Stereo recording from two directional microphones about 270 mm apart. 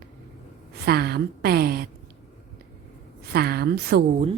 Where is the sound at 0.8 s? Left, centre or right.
Right.